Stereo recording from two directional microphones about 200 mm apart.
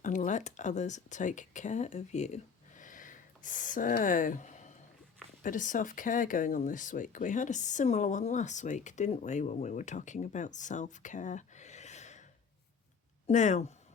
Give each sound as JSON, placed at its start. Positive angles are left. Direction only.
{"t": 0.0, "sound": "speech", "side_deg": 40}
{"t": 13.2, "sound": "speech", "side_deg": 35}